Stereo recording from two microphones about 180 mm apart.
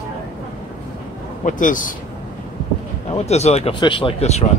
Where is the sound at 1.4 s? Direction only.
45° left (ahead or behind).